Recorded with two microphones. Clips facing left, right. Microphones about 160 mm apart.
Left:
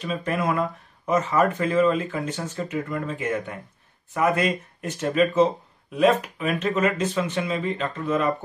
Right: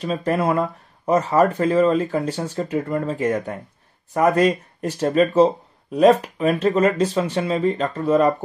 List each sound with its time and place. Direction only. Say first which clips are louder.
0.0 s speech: right 5 dB; 35° right (ahead or behind)